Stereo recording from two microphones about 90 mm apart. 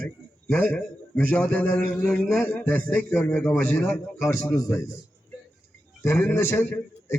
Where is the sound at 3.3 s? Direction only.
25° left (ahead or behind).